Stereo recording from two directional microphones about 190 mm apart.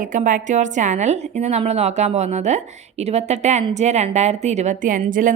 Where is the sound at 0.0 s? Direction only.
40° right (ahead or behind).